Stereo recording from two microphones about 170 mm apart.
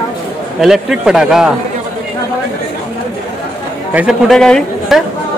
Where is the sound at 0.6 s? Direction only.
5° right (ahead or behind).